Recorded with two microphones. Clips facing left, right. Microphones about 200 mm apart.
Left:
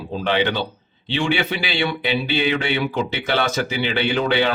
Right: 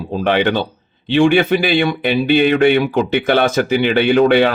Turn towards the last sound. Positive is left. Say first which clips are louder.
# right 8 dB
turn(degrees=-55)  # may be behind; listen again after turning